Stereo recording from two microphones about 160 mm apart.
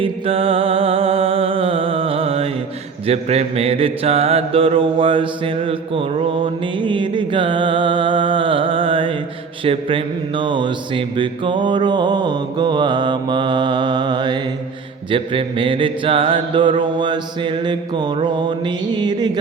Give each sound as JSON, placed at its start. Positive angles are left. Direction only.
{"t": 0.0, "sound": "music", "side_deg": -35}
{"t": 3.1, "sound": "mantra", "side_deg": -40}